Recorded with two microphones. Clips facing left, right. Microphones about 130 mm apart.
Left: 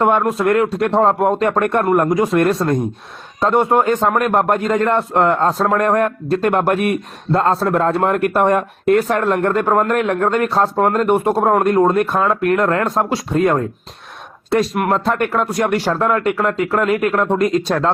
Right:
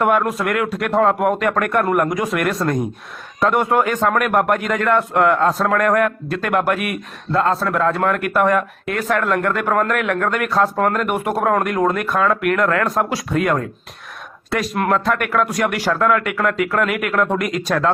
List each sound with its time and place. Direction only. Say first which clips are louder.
0.0 s a man's voice: left 2 dB; 25° left (ahead or behind)
14.8 s speech: left 1 dB; 25° left (ahead or behind)